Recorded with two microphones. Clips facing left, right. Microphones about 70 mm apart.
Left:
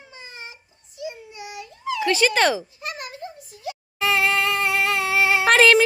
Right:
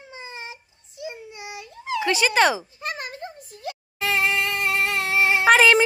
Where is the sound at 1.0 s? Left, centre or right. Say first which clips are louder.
Left 1 dB; right.